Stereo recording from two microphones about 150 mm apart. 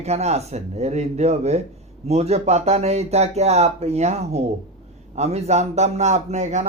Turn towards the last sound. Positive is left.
turn(degrees=-50)  # may be behind; listen again after turning